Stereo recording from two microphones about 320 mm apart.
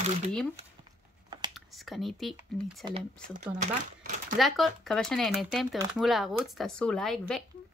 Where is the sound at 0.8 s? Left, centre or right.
Centre.